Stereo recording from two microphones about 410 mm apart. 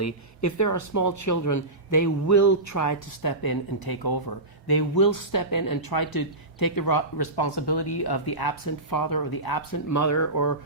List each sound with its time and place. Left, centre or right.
0.0 s speech: left